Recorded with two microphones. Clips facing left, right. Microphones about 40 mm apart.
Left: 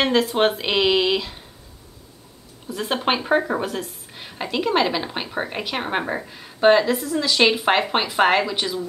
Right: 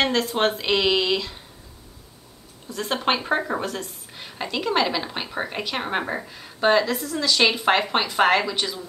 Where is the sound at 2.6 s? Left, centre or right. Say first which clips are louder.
Left 1 dB; centre.